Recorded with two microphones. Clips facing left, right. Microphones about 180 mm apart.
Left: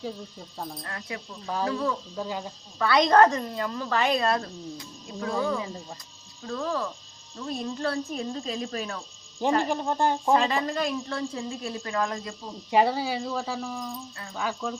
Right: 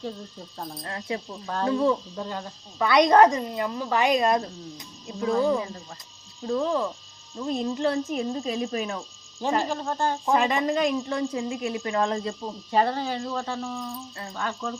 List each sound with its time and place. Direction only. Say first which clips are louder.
0.0 s speech: right 1 dB; centre (ahead or behind)
0.9 s speech: right 5 dB; 25° right (ahead or behind)
2.1 s speech: left 1 dB; 10° left (ahead or behind)
2.7 s speech: right 2 dB; 15° right (ahead or behind)
9.6 s speech: left 2 dB; 15° left (ahead or behind)
10.3 s speech: right 1 dB; 15° right (ahead or behind)
11.9 s speech: right 3 dB; 30° right (ahead or behind)
12.7 s speech: left 1 dB; 10° left (ahead or behind)